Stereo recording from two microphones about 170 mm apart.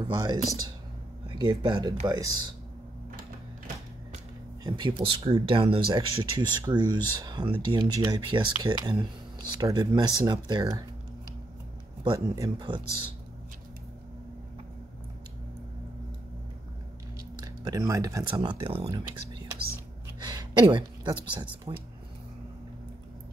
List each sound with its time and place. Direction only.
0.0 s speech: 25° right (ahead or behind)
3.2 s music: 55° right (ahead or behind)
4.6 s speech: 25° right (ahead or behind)
12.0 s speech: 30° right (ahead or behind)
17.6 s speech: 20° right (ahead or behind)
18.2 s a woman's voice: 30° right (ahead or behind)